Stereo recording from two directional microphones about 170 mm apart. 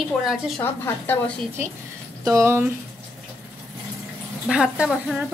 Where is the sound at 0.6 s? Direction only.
15° left (ahead or behind).